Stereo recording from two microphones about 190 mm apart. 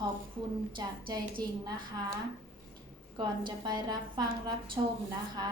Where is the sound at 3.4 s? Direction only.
20° right (ahead or behind).